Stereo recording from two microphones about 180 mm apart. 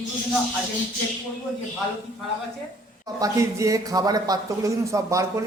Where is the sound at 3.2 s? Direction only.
20° right (ahead or behind).